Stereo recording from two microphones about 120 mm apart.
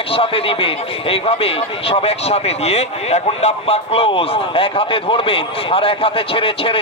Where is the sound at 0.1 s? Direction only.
50° left (ahead or behind).